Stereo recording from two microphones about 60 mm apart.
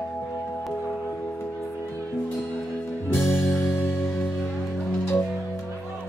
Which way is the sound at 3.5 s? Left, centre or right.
Left.